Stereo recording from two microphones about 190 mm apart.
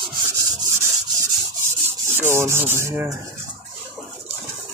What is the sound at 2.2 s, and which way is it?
Rub, 15° right (ahead or behind).